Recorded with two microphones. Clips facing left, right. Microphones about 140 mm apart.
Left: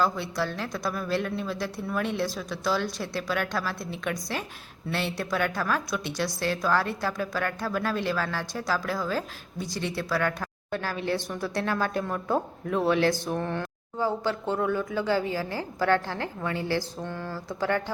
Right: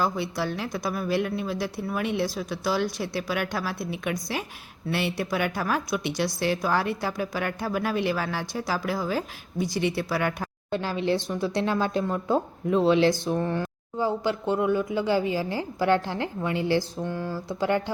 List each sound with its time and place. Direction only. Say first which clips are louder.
0.0 s a woman's voice: even; 10° right (ahead or behind)
13.1 s speech: right 3 dB; 10° left (ahead or behind)
13.4 s a woman's voice: right 3 dB; 10° right (ahead or behind)